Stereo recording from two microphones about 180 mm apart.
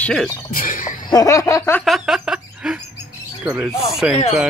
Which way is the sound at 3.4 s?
10° right (ahead or behind).